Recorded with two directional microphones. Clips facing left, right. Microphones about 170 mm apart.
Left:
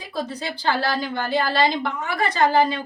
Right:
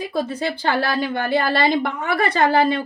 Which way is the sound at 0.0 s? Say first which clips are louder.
Right 6 dB; 50° right (ahead or behind).